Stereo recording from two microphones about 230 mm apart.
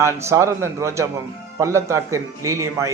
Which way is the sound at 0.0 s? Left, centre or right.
Centre.